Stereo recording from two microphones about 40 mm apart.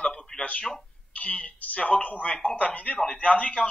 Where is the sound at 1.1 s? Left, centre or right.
Left.